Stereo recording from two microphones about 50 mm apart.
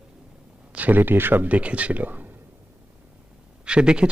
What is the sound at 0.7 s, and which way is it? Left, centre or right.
A man's voice, right.